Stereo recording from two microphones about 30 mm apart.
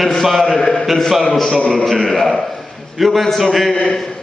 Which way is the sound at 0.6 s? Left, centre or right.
Centre.